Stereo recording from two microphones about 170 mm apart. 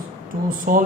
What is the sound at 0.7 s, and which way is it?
Speech, 55° right (ahead or behind).